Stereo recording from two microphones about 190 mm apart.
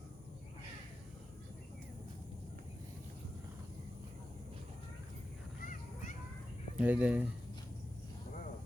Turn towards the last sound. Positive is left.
turn(degrees=-5)  # may be behind; listen again after turning